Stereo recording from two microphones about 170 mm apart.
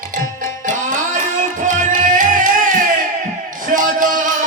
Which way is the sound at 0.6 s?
50° right (ahead or behind).